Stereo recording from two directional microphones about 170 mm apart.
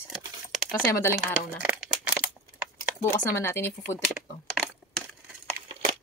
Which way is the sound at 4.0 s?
Centre (ahead or behind).